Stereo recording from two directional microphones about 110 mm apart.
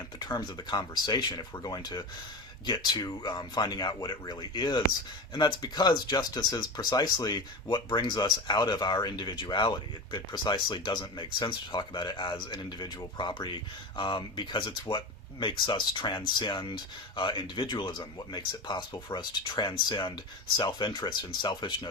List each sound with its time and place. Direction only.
0.2 s speech: 40° left (ahead or behind)